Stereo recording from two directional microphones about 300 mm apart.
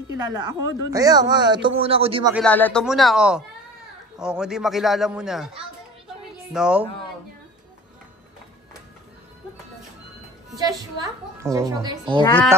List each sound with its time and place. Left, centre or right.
0.3 s speech: centre
2.3 s a man's voice: centre
6.5 s a man's voice: centre
10.6 s speech: centre
12.2 s speech: centre